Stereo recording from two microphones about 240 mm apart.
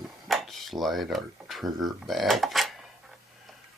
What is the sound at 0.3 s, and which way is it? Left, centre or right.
Speech, centre.